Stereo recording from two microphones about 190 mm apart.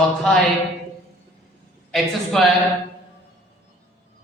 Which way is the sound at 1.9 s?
Centre (ahead or behind).